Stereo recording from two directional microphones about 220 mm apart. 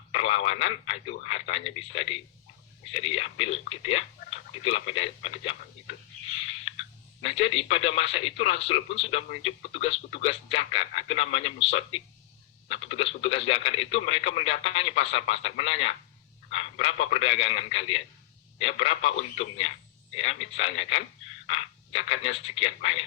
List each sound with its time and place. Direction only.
0.1 s telephone: 25° left (ahead or behind)
0.6 s speech: 25° left (ahead or behind)
7.2 s speech: 25° left (ahead or behind)